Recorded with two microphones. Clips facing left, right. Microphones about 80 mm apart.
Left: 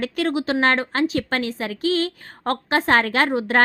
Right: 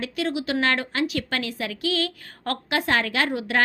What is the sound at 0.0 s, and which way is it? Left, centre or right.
Speech, left.